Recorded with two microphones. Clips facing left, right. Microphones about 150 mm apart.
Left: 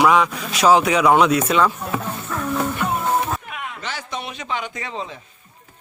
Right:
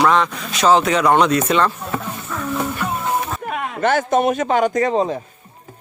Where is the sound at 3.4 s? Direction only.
45° right (ahead or behind).